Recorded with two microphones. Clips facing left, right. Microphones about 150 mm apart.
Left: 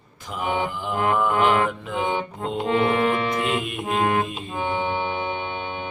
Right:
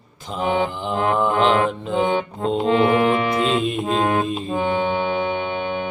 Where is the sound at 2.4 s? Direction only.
20° right (ahead or behind).